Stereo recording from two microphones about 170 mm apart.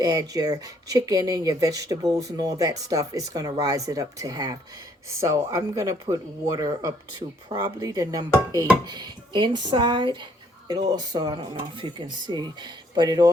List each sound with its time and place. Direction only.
0.0 s speech: 20° right (ahead or behind)